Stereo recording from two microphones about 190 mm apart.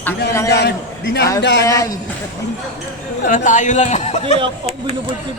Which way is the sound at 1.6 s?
15° left (ahead or behind).